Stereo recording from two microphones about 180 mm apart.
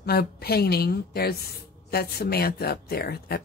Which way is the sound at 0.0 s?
60° left (ahead or behind).